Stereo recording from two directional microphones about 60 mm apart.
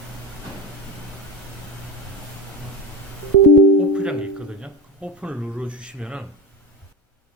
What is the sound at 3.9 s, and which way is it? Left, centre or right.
Speech, centre.